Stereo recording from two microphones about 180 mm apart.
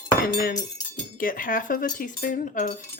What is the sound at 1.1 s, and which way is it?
Speech, 50° left (ahead or behind).